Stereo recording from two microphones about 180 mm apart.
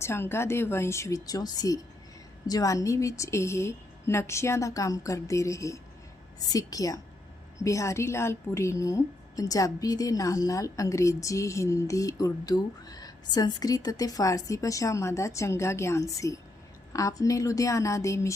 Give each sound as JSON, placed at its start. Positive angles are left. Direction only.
{"t": 0.0, "sound": "a woman's voice", "side_deg": 15}